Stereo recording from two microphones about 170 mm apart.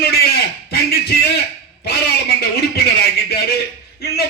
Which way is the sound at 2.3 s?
65° left (ahead or behind).